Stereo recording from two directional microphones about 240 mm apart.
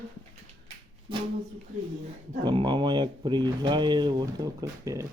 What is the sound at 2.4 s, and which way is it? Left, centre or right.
Speech, centre.